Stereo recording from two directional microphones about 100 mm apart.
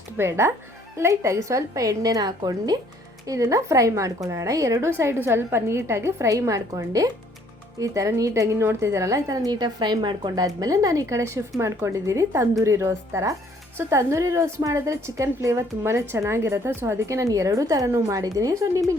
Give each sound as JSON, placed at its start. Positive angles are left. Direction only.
{"t": 0.2, "sound": "a woman's voice", "side_deg": -25}